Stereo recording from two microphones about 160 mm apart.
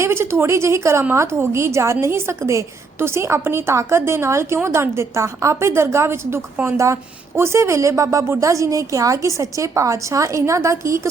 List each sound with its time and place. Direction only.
0.0 s a woman's voice: 15° right (ahead or behind)